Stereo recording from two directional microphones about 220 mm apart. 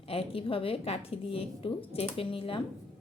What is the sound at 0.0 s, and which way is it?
A woman's voice, 25° left (ahead or behind).